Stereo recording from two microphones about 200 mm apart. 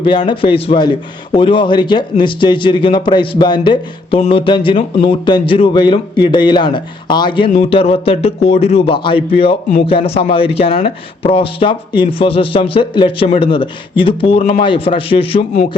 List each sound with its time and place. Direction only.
0.0 s speech: 25° left (ahead or behind)